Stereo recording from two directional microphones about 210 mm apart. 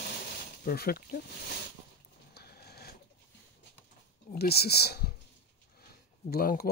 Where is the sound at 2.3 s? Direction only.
50° left (ahead or behind).